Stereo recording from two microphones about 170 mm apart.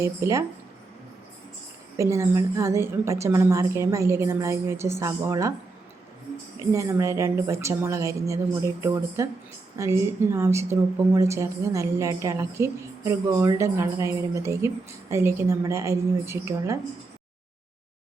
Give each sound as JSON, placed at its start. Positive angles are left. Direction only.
{"t": 0.0, "sound": "a woman's voice", "side_deg": -20}
{"t": 2.0, "sound": "a woman's voice", "side_deg": -15}
{"t": 6.6, "sound": "a woman's voice", "side_deg": -15}